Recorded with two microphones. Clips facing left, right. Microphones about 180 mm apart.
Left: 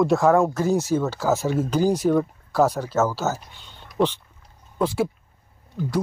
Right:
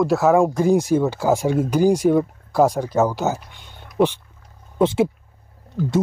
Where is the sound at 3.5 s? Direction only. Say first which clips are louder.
Right 4 dB; 10° right (ahead or behind).